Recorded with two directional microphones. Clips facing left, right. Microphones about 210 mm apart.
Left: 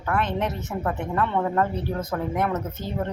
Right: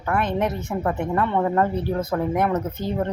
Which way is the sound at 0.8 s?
20° right (ahead or behind).